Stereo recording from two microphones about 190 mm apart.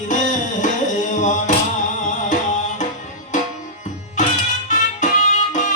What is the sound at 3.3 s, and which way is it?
Tabla, 40° left (ahead or behind).